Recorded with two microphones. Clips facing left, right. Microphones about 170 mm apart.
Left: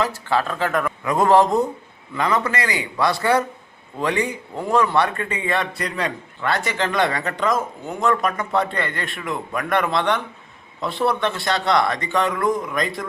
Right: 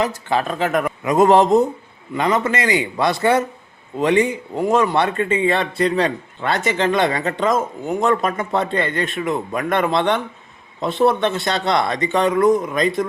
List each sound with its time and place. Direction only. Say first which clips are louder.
0.0 s speech: right 1 dB; 20° right (ahead or behind)